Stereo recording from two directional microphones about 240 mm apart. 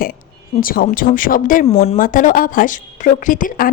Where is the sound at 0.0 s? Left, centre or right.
Left.